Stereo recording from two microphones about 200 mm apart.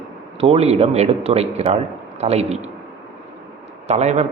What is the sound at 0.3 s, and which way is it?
A man's voice, 30° right (ahead or behind).